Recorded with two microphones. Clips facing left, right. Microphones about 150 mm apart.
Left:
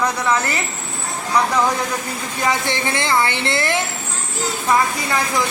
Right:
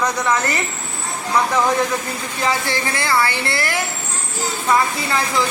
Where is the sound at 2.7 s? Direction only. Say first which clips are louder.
Left 1 dB; 20° left (ahead or behind).